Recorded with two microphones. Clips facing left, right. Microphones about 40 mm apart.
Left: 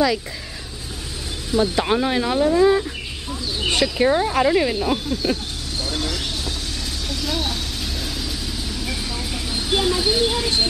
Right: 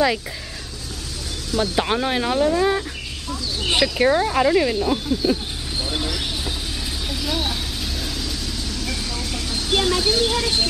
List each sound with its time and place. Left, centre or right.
1.8 s speech: centre
2.6 s speech: centre
5.8 s a sound: centre
7.1 s vehicle: centre